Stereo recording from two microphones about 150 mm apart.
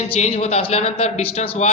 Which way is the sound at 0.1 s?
45° left (ahead or behind).